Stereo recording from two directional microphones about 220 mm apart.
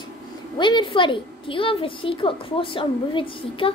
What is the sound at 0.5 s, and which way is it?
A woman's voice, 20° left (ahead or behind).